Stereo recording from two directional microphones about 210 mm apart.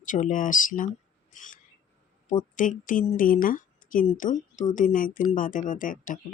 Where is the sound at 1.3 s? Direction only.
40° left (ahead or behind).